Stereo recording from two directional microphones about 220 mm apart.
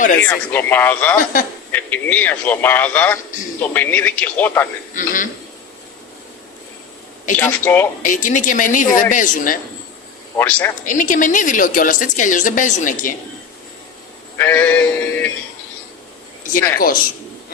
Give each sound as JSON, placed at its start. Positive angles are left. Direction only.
{"t": 0.2, "sound": "a man's voice", "side_deg": 10}
{"t": 1.2, "sound": "a woman's voice", "side_deg": 40}
{"t": 1.7, "sound": "a man's voice", "side_deg": 5}
{"t": 4.9, "sound": "a woman's voice", "side_deg": 35}
{"t": 7.3, "sound": "a man's voice", "side_deg": 10}
{"t": 8.0, "sound": "a woman's voice", "side_deg": 35}
{"t": 10.3, "sound": "a man's voice", "side_deg": 10}
{"t": 10.8, "sound": "a woman's voice", "side_deg": 35}
{"t": 14.3, "sound": "synthetic singing", "side_deg": 10}